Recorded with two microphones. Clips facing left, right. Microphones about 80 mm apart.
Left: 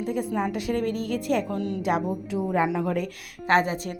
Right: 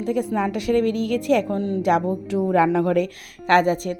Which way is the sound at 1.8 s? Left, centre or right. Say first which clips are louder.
Right 7 dB; right.